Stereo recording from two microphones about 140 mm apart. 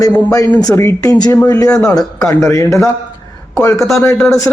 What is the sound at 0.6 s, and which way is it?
Speech, 20° left (ahead or behind).